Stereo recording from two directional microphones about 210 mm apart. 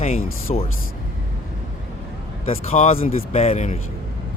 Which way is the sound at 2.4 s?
30° left (ahead or behind).